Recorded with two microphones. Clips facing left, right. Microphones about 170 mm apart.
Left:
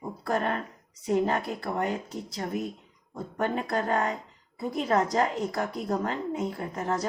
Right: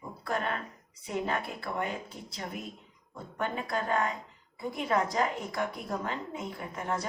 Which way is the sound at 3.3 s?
40° left (ahead or behind).